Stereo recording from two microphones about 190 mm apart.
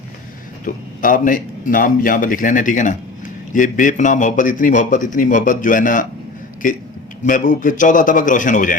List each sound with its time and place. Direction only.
0.6 s speech: 45° left (ahead or behind)
7.3 s speech: 45° left (ahead or behind)